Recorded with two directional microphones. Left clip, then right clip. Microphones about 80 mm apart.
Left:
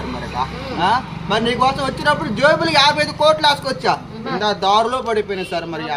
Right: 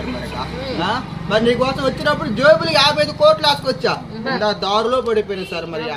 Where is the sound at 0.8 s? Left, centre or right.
Left.